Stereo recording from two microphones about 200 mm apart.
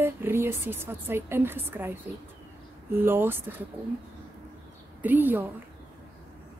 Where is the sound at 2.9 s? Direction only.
10° right (ahead or behind).